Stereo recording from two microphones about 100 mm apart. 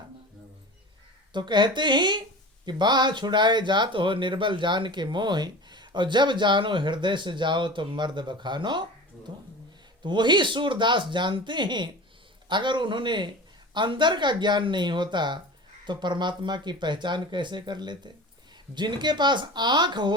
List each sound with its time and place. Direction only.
1.3 s speech: 50° right (ahead or behind)